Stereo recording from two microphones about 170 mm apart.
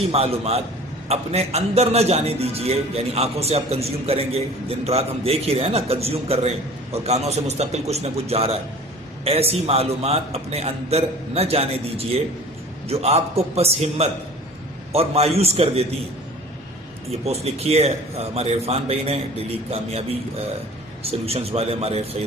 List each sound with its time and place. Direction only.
0.1 s a man's voice: 35° right (ahead or behind)
17.2 s a man's voice: 35° right (ahead or behind)